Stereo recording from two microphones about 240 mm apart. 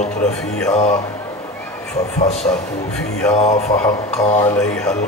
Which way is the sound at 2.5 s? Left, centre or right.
Centre.